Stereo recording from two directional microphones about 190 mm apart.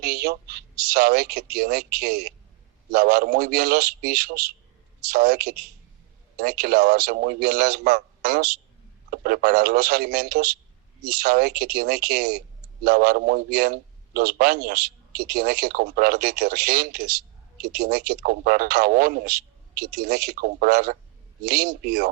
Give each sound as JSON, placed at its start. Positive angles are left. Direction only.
{"t": 0.0, "sound": "a man's voice", "side_deg": -55}